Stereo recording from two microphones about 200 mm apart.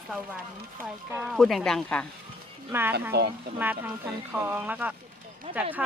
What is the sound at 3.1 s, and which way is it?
Speech, 55° right (ahead or behind).